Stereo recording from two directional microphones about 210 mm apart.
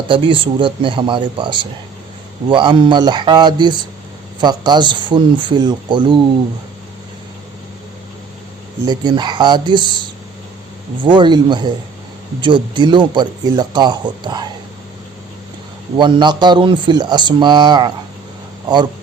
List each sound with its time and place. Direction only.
0.1 s speech: 25° right (ahead or behind)
8.8 s speech: 20° right (ahead or behind)
16.0 s speech: 20° right (ahead or behind)